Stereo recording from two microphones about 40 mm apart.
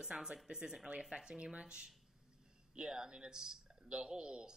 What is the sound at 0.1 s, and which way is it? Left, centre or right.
Speech, right.